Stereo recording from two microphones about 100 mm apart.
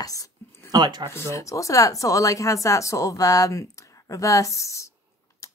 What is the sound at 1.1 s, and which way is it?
Speech, 30° left (ahead or behind).